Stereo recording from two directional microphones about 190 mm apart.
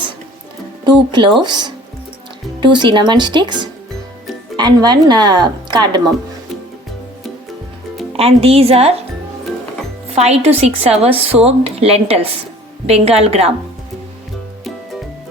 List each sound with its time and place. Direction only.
0.9 s speech: 25° right (ahead or behind)
8.1 s a woman's voice: 30° right (ahead or behind)
10.2 s a woman's voice: 35° right (ahead or behind)